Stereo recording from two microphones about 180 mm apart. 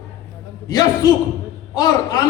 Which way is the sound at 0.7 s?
20° left (ahead or behind).